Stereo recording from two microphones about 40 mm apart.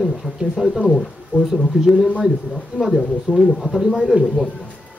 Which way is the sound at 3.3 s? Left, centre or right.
Right.